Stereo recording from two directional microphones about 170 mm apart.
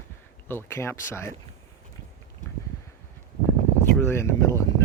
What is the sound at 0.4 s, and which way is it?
Speech, 15° left (ahead or behind).